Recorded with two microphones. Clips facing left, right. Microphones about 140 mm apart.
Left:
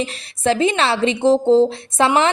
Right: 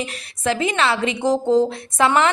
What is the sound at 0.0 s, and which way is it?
Speech, 30° left (ahead or behind).